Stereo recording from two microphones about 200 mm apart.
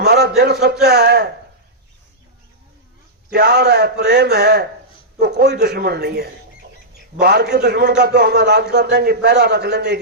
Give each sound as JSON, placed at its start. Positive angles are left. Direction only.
{"t": 0.0, "sound": "a man's voice", "side_deg": -55}
{"t": 3.3, "sound": "a man's voice", "side_deg": -55}